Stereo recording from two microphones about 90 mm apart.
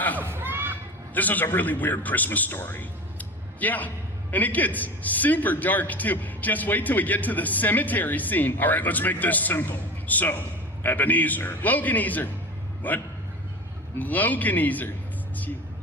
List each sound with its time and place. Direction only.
0.2 s a sound: 25° right (ahead or behind)
1.1 s a man's voice: 20° left (ahead or behind)
14.0 s a man's voice: 20° left (ahead or behind)